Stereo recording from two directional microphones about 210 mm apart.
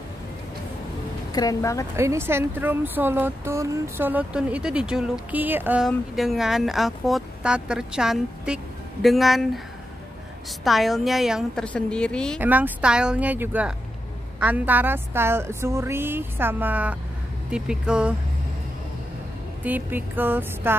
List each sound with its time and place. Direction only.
1.3 s speech: 15° left (ahead or behind)
2.0 s speech: 10° right (ahead or behind)
10.6 s speech: centre (ahead or behind)
12.4 s speech: 10° right (ahead or behind)
19.6 s speech: 10° right (ahead or behind)